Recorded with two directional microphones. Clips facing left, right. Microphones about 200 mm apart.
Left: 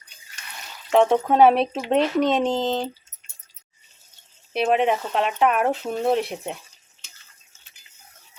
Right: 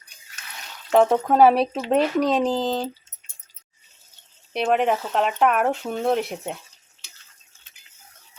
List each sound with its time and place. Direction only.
0.3 s a sound: centre (ahead or behind)
1.9 s speech: centre (ahead or behind)
4.5 s speech: centre (ahead or behind)